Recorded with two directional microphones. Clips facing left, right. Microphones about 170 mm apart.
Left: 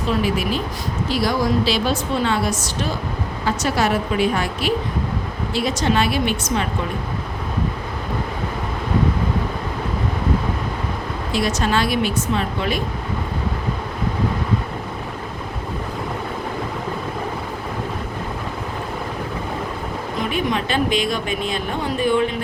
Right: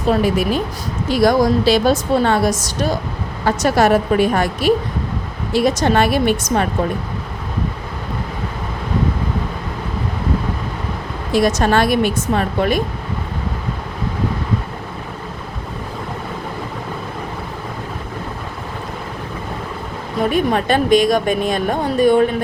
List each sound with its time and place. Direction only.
0.1 s a woman's voice: 45° right (ahead or behind)
5.6 s a woman's voice: 50° right (ahead or behind)
11.3 s a woman's voice: 50° right (ahead or behind)
20.3 s a woman's voice: 50° right (ahead or behind)